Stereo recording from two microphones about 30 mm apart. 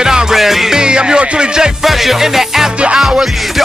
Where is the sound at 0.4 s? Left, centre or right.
Centre.